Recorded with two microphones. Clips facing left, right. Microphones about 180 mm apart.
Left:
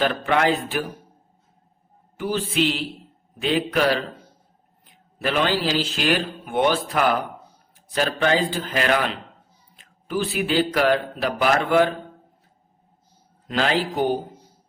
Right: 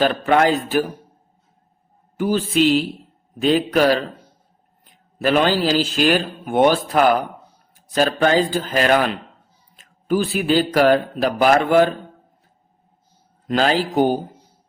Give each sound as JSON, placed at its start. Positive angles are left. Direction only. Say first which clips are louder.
{"t": 0.0, "sound": "speech", "louder": "right 4 dB", "side_deg": -40}
{"t": 2.1, "sound": "speech", "louder": "right 5 dB", "side_deg": -45}
{"t": 5.2, "sound": "speech", "louder": "right 5 dB", "side_deg": -45}
{"t": 7.9, "sound": "speech", "louder": "right 4 dB", "side_deg": -40}
{"t": 13.5, "sound": "speech", "louder": "right 4 dB", "side_deg": -40}